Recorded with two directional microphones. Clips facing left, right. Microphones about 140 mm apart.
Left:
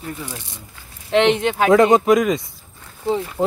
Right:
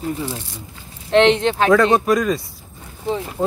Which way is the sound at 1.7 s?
20° left (ahead or behind).